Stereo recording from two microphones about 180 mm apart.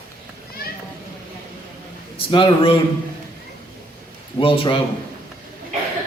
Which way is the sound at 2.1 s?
30° left (ahead or behind).